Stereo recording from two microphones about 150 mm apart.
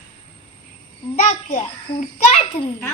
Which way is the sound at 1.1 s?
55° left (ahead or behind).